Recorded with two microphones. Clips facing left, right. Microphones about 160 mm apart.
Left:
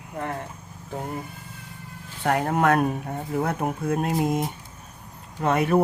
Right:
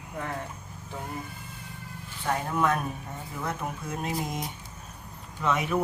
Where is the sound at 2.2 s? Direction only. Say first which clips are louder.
Left 5 dB; 65° left (ahead or behind).